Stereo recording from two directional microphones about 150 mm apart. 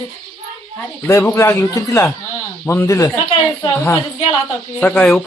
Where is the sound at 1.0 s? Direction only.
20° left (ahead or behind).